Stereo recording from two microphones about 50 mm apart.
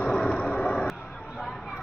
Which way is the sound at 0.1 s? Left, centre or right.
Centre.